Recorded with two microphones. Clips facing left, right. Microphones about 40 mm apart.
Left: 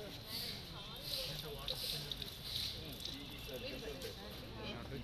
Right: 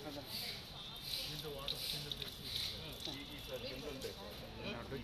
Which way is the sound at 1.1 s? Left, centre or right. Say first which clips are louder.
Even; right.